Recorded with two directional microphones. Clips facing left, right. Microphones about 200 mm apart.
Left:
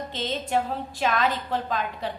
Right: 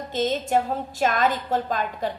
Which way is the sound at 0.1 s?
45° right (ahead or behind).